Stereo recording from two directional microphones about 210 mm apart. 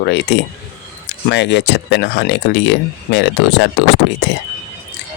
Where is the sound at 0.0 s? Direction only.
55° left (ahead or behind).